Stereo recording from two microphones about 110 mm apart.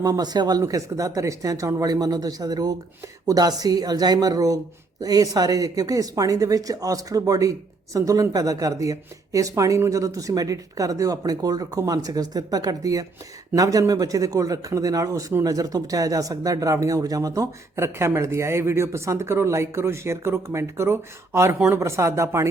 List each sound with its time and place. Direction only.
0.0 s speech: 35° right (ahead or behind)